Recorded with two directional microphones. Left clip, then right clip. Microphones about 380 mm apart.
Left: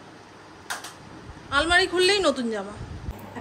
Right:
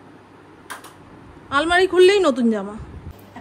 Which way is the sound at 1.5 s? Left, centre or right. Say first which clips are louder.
Right 3 dB; centre.